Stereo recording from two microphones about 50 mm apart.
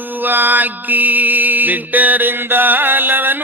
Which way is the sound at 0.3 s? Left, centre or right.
Right.